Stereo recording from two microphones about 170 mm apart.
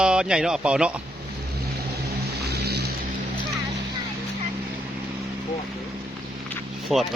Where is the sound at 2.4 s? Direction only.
75° right (ahead or behind).